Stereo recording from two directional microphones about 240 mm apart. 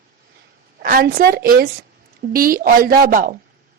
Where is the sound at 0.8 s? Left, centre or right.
Right.